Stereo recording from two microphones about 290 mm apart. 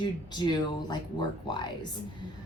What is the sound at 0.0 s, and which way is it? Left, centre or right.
Speech, centre.